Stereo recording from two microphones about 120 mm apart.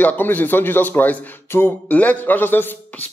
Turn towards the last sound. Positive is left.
turn(degrees=15)  # may be behind; listen again after turning